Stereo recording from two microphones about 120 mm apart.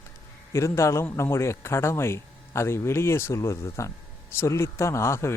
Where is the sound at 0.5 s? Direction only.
25° left (ahead or behind).